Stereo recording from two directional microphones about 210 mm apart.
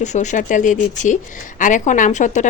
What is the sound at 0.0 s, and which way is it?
Speech, 35° left (ahead or behind).